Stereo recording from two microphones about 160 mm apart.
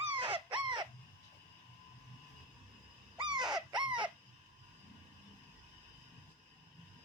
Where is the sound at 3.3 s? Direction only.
25° right (ahead or behind).